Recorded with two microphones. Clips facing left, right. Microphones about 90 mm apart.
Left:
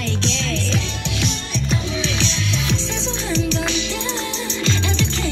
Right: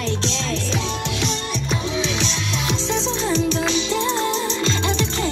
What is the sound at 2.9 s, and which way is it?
Music, 15° right (ahead or behind).